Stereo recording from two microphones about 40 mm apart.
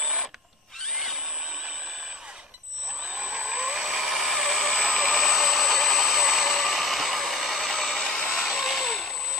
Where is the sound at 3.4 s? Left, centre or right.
Centre.